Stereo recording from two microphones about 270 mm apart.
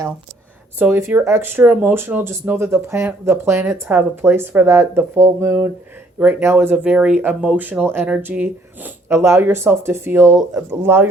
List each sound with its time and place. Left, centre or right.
0.8 s speech: centre